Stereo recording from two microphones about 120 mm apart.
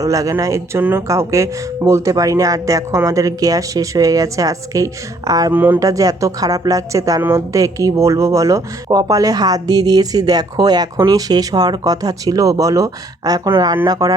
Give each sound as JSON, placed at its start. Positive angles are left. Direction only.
{"t": 0.0, "sound": "speech", "side_deg": -30}
{"t": 5.5, "sound": "speech", "side_deg": -15}
{"t": 5.8, "sound": "speech", "side_deg": -30}